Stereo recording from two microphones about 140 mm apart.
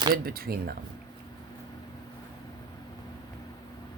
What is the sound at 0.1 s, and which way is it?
Speech, 90° right.